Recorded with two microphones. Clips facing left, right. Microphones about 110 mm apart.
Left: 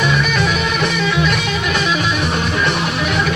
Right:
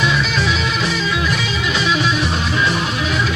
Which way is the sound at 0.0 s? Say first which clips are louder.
Left 2 dB; 55° left (ahead or behind).